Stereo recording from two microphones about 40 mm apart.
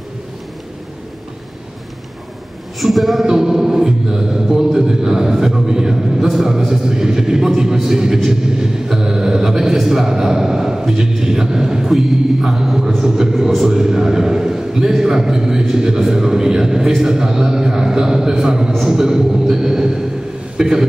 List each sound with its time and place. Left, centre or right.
2.8 s a woman's voice: centre
3.3 s music: centre
20.5 s a man's voice: centre